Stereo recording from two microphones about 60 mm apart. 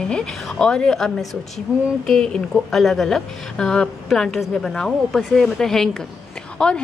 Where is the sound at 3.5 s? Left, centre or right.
Centre.